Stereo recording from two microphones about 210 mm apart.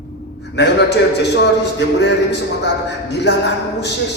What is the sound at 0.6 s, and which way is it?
A man's voice, 55° left (ahead or behind).